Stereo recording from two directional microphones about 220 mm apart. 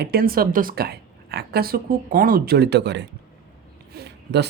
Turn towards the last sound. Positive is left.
turn(degrees=-50)  # may be behind; listen again after turning